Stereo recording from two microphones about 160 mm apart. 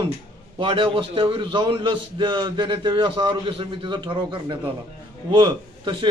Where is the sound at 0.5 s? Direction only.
35° right (ahead or behind).